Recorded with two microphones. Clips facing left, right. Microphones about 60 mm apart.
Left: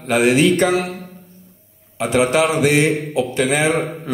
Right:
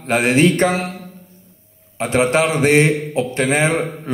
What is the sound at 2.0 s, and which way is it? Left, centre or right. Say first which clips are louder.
A man's voice: even; right.